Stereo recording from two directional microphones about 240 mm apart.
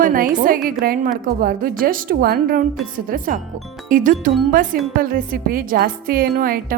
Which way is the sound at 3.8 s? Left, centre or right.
Right.